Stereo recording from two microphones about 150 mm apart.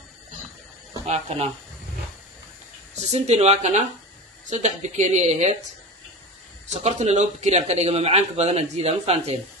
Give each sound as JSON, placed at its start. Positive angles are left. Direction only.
{"t": 1.0, "sound": "speech", "side_deg": -45}
{"t": 3.0, "sound": "speech", "side_deg": -45}
{"t": 6.8, "sound": "speech", "side_deg": -50}